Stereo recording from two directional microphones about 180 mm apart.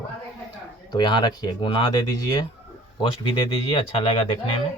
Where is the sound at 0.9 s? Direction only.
25° left (ahead or behind).